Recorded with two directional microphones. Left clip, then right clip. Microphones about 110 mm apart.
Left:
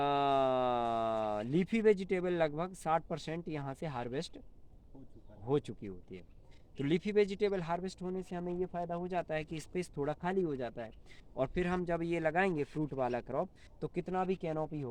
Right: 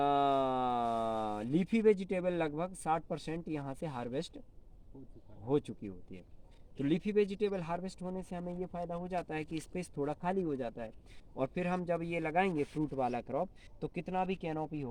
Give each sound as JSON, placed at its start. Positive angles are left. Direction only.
{"t": 0.0, "sound": "speech", "side_deg": 45}
{"t": 5.5, "sound": "speech", "side_deg": 40}